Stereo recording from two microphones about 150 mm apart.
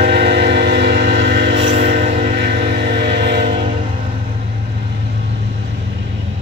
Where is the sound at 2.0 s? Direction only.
55° right (ahead or behind).